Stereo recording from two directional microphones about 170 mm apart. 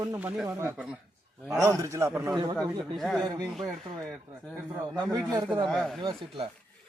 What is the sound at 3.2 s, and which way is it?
Speech, 25° right (ahead or behind).